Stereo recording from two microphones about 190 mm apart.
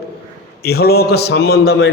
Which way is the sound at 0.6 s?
55° left (ahead or behind).